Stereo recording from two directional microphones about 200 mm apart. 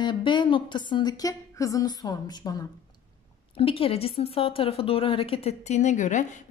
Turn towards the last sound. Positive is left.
turn(degrees=40)  # may be behind; listen again after turning